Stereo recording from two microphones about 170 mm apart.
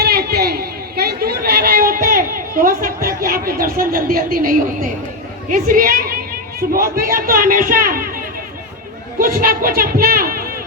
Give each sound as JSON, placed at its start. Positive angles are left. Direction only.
{"t": 0.0, "sound": "chatter", "side_deg": -65}
{"t": 5.5, "sound": "a woman's voice", "side_deg": -55}